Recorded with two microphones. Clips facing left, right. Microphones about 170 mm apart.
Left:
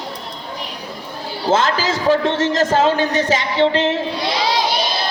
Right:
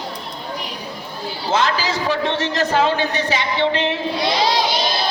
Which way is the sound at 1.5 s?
50° left (ahead or behind).